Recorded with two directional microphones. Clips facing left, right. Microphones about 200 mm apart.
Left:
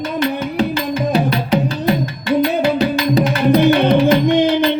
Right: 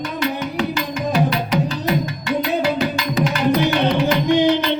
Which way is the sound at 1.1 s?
30° left (ahead or behind).